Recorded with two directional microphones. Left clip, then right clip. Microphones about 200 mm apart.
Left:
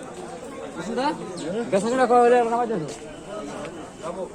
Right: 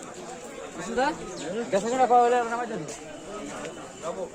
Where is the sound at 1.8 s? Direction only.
35° left (ahead or behind).